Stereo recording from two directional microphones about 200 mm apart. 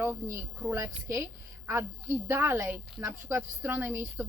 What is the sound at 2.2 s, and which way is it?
A woman's voice, 10° right (ahead or behind).